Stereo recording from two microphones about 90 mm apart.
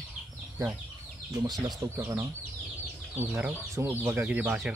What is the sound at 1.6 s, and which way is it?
Speech, 40° right (ahead or behind).